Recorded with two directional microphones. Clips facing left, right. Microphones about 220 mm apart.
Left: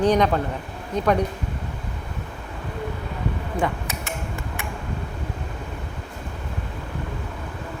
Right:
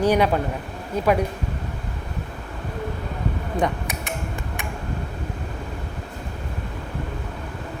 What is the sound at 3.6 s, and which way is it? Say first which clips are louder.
Tick: right 2 dB; 15° right (ahead or behind).